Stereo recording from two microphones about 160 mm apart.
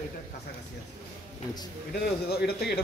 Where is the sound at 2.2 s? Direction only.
85° left.